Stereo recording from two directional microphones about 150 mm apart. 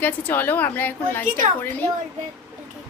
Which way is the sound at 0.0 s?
10° left (ahead or behind).